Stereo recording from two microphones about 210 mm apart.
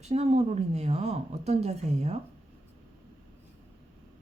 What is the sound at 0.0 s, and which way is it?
Speech, 30° right (ahead or behind).